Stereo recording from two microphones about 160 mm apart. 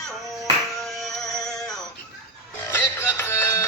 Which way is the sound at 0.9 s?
Centre (ahead or behind).